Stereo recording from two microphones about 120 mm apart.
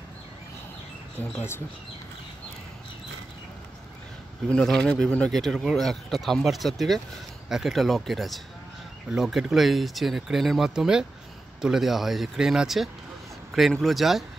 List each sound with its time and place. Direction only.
1.3 s speech: 20° left (ahead or behind)
4.5 s speech: 5° left (ahead or behind)